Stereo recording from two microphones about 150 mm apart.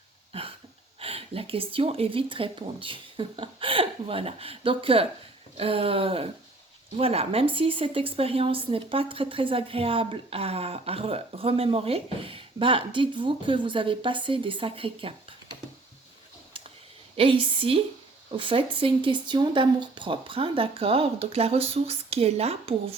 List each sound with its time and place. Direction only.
0.3 s hiccup: 40° right (ahead or behind)
0.9 s speech: 40° right (ahead or behind)
16.5 s a sound: 35° right (ahead or behind)
17.2 s speech: 35° right (ahead or behind)